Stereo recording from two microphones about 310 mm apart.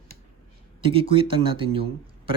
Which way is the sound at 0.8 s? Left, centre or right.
Centre.